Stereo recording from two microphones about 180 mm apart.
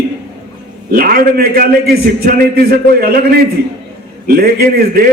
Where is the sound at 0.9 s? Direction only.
55° right (ahead or behind).